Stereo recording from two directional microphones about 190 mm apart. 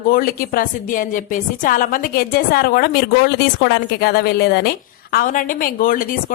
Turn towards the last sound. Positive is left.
turn(degrees=45)  # may be behind; listen again after turning